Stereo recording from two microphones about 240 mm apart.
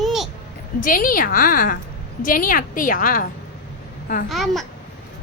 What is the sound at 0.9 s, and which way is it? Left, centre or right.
A woman's voice, left.